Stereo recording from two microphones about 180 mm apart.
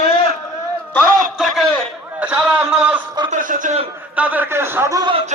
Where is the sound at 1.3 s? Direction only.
Centre (ahead or behind).